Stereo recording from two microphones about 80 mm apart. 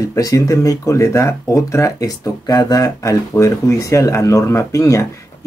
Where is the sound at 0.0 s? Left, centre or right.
Left.